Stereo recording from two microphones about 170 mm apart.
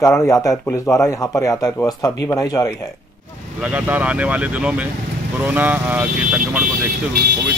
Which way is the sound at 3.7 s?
10° right (ahead or behind).